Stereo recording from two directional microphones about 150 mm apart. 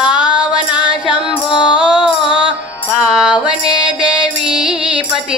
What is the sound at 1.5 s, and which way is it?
Music, 30° left (ahead or behind).